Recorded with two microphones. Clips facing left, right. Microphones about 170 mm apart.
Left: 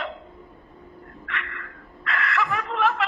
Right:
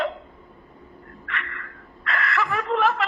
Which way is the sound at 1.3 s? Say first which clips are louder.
Right 1 dB; 40° right (ahead or behind).